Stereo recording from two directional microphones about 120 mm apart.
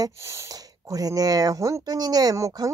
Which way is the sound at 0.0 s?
25° right (ahead or behind).